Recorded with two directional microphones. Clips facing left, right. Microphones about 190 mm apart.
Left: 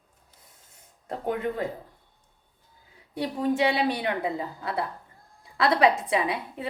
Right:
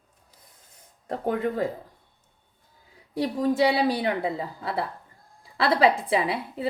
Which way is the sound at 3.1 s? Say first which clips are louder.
Right 2 dB; 40° right (ahead or behind).